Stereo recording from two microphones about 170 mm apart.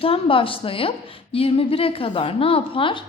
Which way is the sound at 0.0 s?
30° left (ahead or behind).